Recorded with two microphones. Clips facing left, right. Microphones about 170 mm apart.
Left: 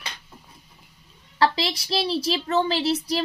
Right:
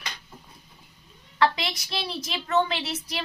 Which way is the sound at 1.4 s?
35° left (ahead or behind).